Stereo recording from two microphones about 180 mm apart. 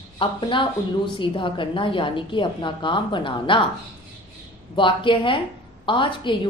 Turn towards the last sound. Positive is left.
turn(degrees=25)  # may be behind; listen again after turning